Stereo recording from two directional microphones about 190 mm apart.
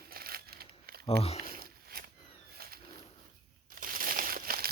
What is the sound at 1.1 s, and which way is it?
Speech, 30° left (ahead or behind).